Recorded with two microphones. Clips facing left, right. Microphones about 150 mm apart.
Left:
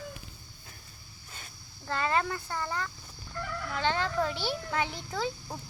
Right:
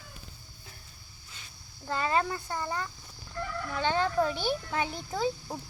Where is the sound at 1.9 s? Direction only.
20° right (ahead or behind).